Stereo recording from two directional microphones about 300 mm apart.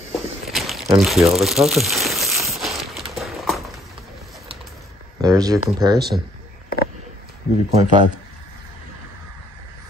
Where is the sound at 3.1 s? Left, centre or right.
Centre.